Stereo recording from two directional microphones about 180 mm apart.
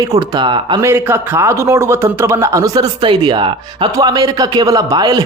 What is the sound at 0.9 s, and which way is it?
A man's voice, 15° right (ahead or behind).